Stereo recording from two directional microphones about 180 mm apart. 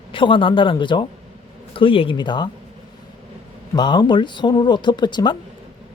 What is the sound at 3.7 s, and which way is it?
Speech, 25° left (ahead or behind).